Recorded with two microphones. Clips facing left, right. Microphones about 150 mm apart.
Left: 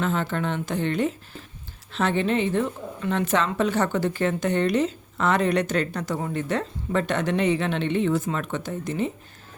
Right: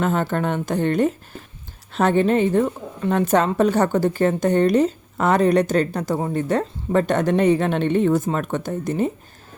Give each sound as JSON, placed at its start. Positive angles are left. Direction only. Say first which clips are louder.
{"t": 0.0, "sound": "a woman's voice", "louder": "right 4 dB", "side_deg": -50}